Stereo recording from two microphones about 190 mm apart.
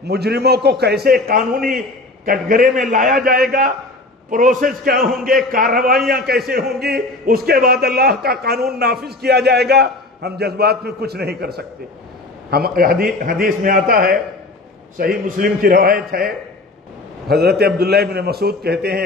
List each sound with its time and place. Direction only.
0.0 s a man's voice: 60° right (ahead or behind)
4.3 s a man's voice: 45° right (ahead or behind)